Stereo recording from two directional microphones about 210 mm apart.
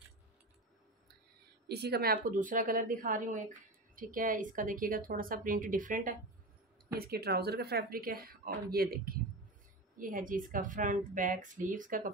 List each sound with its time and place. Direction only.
1.7 s a woman's voice: 50° right (ahead or behind)
2.2 s a woman's voice: 40° right (ahead or behind)